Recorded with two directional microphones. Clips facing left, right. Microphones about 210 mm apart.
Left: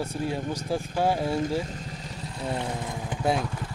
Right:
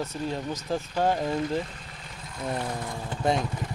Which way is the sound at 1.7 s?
40° left (ahead or behind).